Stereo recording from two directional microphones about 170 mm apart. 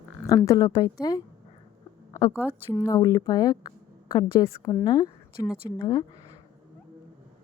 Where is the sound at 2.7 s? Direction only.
20° left (ahead or behind).